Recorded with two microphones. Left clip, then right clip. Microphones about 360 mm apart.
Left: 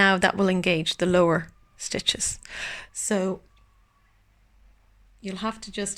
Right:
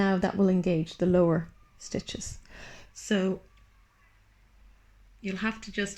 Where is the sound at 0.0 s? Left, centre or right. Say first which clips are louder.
Left 7 dB; left.